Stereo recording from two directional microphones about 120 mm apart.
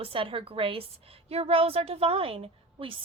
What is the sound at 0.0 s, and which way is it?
A woman's voice, 50° right (ahead or behind).